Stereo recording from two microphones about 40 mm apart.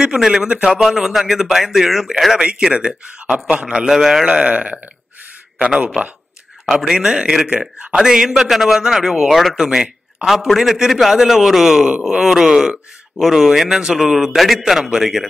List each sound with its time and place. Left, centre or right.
0.0 s a man's voice: centre
2.4 s a man's voice: right
6.9 s a man's voice: centre
9.3 s a man's voice: centre
9.6 s a man's voice: centre